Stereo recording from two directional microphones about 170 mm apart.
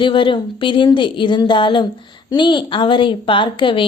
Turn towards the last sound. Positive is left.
turn(degrees=30)  # may be behind; listen again after turning